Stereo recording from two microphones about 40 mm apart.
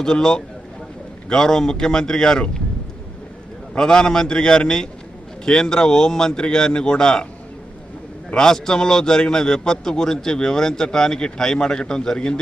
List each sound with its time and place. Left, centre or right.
0.0 s a man's voice: centre
3.8 s a man's voice: centre
8.3 s a man's voice: centre